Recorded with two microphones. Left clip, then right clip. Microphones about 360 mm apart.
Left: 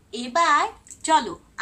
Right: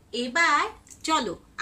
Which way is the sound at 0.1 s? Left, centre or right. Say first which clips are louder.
Left 3 dB; centre.